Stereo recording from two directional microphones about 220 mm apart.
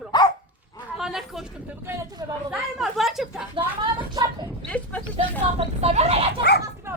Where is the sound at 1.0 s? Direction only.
Centre (ahead or behind).